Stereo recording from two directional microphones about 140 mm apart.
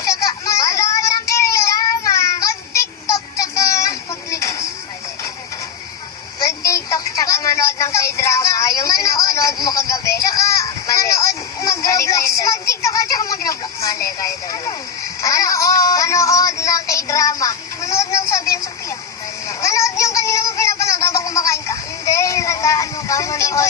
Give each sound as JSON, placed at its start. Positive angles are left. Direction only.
{"t": 0.0, "sound": "child singing", "side_deg": 20}
{"t": 6.6, "sound": "a sound", "side_deg": 25}
{"t": 19.4, "sound": "synthetic singing", "side_deg": 20}